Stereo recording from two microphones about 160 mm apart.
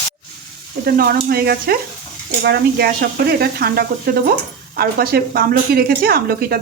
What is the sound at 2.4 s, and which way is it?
A woman's voice, 85° right.